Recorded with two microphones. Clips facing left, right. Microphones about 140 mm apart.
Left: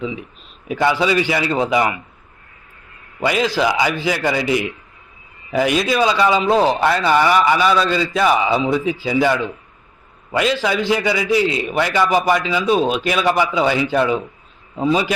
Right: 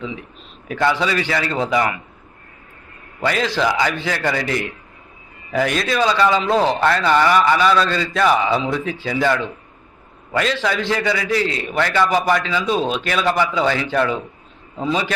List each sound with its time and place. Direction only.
0.7 s a man's voice: 20° left (ahead or behind)
0.9 s a man's voice: 5° left (ahead or behind)
3.2 s a man's voice: 5° left (ahead or behind)